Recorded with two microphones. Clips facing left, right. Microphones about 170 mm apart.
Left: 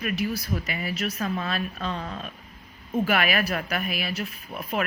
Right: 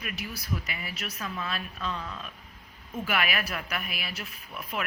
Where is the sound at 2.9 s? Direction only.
40° left (ahead or behind).